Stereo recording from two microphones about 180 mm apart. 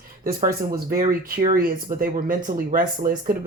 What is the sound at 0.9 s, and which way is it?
Speech, 40° right (ahead or behind).